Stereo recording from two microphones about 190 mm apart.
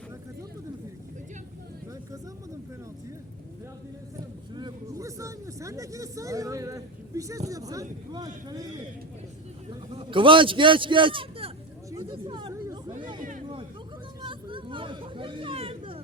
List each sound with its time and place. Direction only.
4.5 s speech: 20° right (ahead or behind)
9.6 s a man's voice: 30° right (ahead or behind)
12.0 s chatter: 25° right (ahead or behind)
14.2 s hubbub: 25° right (ahead or behind)